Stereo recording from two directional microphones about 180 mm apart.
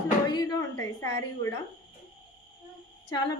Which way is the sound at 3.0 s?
20° left (ahead or behind).